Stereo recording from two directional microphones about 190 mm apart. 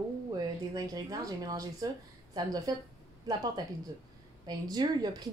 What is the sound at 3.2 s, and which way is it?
A woman's voice, 20° right (ahead or behind).